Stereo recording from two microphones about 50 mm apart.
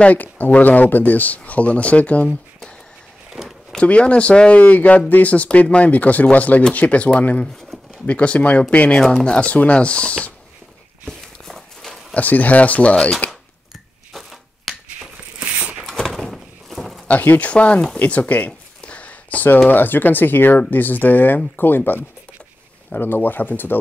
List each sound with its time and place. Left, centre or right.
0.0 s speech: left
3.4 s a sound: centre
3.8 s speech: left
11.1 s walk: centre
12.1 s speech: left
14.1 s shuffling cards: centre
16.1 s a sound: centre
17.1 s speech: left
17.4 s speech: left
18.9 s a sound: left
19.7 s speech: left